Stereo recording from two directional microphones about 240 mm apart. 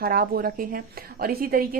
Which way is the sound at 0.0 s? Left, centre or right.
Right.